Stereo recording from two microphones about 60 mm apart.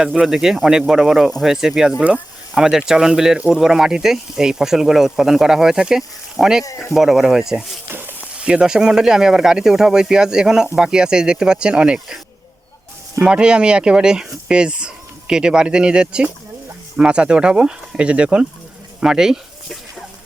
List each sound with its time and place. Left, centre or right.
0.0 s speech: centre
11.9 s speech: centre
13.2 s speech: centre
19.6 s a sound: centre